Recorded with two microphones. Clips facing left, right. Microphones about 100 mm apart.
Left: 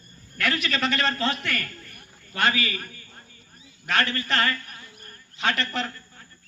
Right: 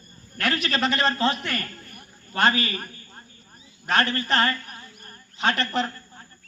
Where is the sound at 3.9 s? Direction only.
35° right (ahead or behind).